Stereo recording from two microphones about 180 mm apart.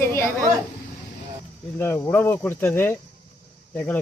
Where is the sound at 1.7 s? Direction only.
10° left (ahead or behind).